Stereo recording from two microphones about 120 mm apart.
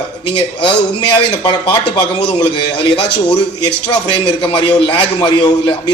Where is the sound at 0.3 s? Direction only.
45° left (ahead or behind).